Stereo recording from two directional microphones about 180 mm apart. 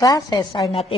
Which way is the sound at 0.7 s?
35° left (ahead or behind).